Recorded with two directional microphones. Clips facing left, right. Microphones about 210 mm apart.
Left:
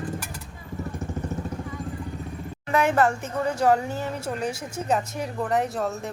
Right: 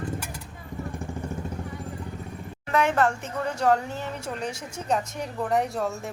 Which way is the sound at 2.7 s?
5° left (ahead or behind).